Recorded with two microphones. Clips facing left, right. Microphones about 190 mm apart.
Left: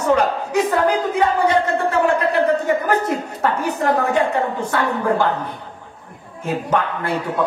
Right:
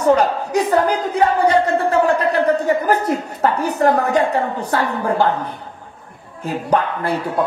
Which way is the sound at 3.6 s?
35° right (ahead or behind).